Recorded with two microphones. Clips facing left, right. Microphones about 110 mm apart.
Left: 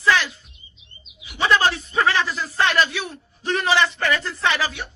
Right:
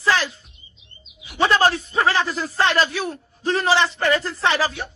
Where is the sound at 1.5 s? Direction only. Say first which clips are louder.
Right 1 dB; 40° right (ahead or behind).